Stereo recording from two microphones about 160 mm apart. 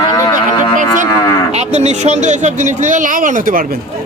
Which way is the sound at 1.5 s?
45° right (ahead or behind).